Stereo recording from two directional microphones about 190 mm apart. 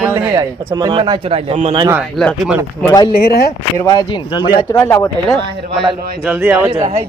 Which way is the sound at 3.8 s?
20° left (ahead or behind).